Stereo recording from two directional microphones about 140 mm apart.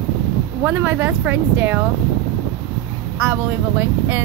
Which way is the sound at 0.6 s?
15° right (ahead or behind).